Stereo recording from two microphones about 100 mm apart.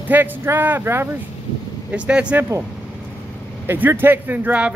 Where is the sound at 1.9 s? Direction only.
10° right (ahead or behind).